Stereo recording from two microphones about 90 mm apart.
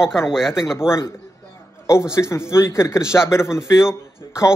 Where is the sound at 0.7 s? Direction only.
30° left (ahead or behind).